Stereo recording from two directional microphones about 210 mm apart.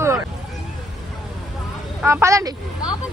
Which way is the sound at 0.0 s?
15° right (ahead or behind).